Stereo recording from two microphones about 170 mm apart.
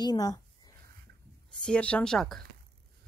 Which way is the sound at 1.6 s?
5° left (ahead or behind).